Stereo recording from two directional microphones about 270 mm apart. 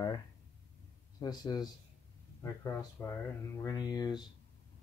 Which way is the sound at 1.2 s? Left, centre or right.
Centre.